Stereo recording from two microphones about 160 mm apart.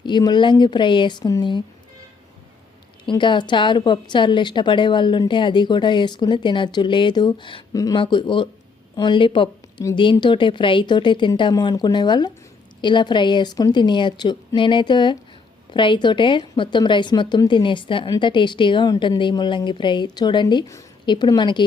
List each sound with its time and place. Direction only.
0.0 s a woman's voice: 25° left (ahead or behind)
3.1 s a woman's voice: 30° left (ahead or behind)